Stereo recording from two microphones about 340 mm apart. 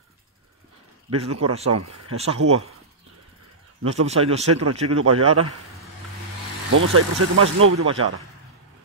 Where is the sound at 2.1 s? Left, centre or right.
Centre.